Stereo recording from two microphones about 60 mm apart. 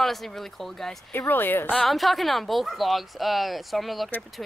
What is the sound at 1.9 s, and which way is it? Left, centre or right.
Speech, centre.